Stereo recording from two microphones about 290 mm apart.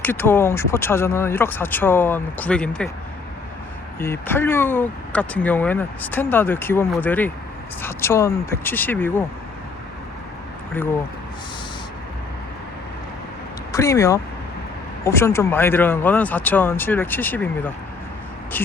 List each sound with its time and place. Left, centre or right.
0.0 s speech: centre
4.0 s speech: centre
13.7 s speech: centre